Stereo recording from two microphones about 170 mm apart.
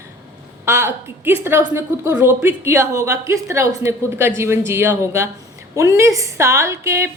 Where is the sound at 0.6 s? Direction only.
15° right (ahead or behind).